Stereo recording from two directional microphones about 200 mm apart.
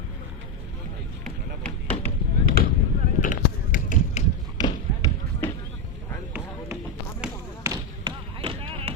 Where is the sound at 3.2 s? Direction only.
40° left (ahead or behind).